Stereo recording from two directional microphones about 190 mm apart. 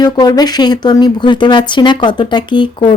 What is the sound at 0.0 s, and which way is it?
Speech, 20° left (ahead or behind).